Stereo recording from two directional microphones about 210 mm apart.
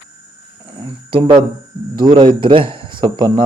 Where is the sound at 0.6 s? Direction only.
20° right (ahead or behind).